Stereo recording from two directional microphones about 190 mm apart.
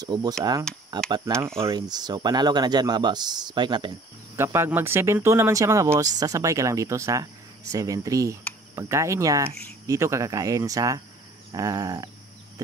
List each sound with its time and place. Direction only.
0.0 s speech: 20° right (ahead or behind)
4.4 s speech: 15° right (ahead or behind)